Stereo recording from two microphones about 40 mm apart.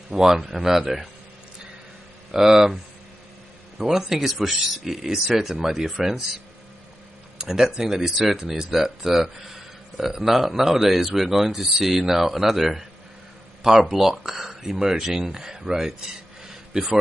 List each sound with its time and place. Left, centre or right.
0.1 s speech: centre
2.3 s speech: centre
3.9 s speech: centre
7.3 s speech: centre
13.8 s a man's voice: centre